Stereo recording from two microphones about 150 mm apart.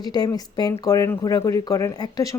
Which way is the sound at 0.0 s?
25° left (ahead or behind).